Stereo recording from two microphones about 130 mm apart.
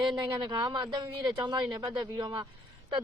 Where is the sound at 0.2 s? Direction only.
40° right (ahead or behind).